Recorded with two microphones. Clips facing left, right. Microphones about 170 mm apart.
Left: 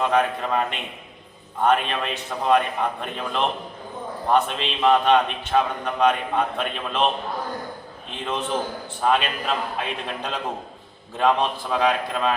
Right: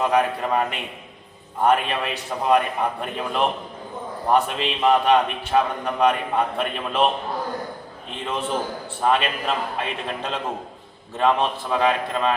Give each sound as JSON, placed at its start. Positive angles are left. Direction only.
{"t": 0.0, "sound": "a man's voice", "side_deg": -5}
{"t": 8.1, "sound": "a man's voice", "side_deg": -5}